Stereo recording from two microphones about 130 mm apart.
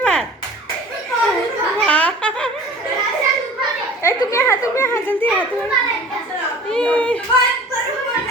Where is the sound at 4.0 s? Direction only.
20° left (ahead or behind).